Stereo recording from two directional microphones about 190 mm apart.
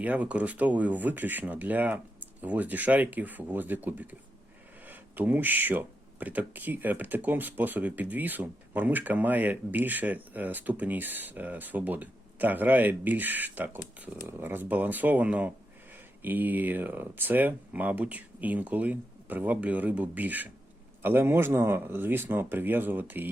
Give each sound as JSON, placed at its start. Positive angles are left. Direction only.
{"t": 0.0, "sound": "speech", "side_deg": -5}